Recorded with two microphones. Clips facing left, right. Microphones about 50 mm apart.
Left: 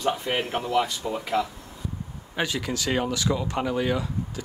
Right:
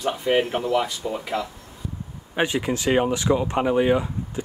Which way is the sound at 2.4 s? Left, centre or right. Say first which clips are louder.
Right 5 dB; right.